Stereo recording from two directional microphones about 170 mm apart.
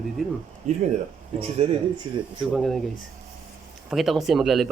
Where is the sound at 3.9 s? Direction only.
Centre (ahead or behind).